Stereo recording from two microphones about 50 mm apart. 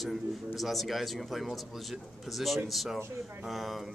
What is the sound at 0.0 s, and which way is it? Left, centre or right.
Speech, centre.